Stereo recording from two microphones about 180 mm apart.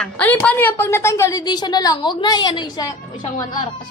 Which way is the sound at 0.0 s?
5° left (ahead or behind).